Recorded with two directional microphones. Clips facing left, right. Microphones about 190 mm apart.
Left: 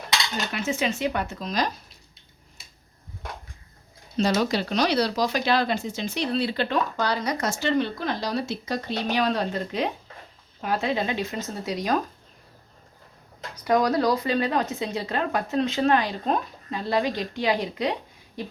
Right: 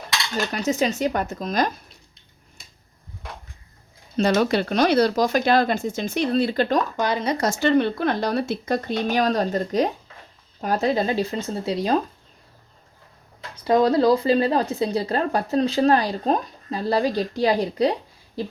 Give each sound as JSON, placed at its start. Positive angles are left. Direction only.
{"t": 0.5, "sound": "speech", "side_deg": -40}
{"t": 4.2, "sound": "speech", "side_deg": -55}
{"t": 6.9, "sound": "speech", "side_deg": -20}
{"t": 7.6, "sound": "speech", "side_deg": -55}
{"t": 13.7, "sound": "speech", "side_deg": -25}